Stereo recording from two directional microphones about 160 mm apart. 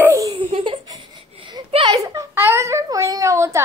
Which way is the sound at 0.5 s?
30° right (ahead or behind).